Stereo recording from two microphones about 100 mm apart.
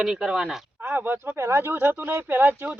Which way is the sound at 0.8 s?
20° right (ahead or behind).